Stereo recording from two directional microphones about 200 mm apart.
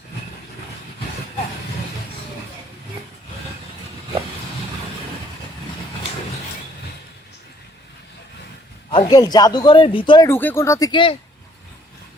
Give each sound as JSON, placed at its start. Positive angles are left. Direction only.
{"t": 8.9, "sound": "a man's voice", "side_deg": 20}
{"t": 10.2, "sound": "speech", "side_deg": 10}